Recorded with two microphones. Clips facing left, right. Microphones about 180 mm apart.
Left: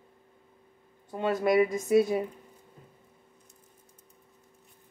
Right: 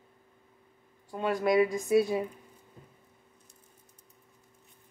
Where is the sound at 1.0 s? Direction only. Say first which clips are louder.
Left 1 dB; 25° left (ahead or behind).